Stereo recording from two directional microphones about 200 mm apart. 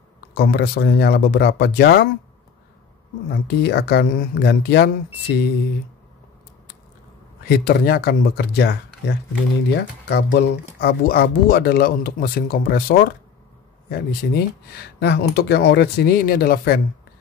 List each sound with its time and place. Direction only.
0.3 s speech: 50° left (ahead or behind)
3.3 s speech: 55° left (ahead or behind)
7.4 s speech: 50° left (ahead or behind)